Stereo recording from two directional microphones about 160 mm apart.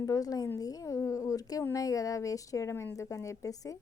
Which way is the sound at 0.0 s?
20° left (ahead or behind).